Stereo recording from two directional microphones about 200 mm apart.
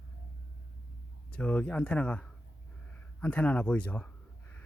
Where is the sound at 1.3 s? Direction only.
5° left (ahead or behind).